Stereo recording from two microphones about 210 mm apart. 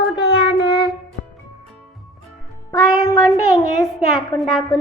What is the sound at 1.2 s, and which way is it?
Music, 40° left (ahead or behind).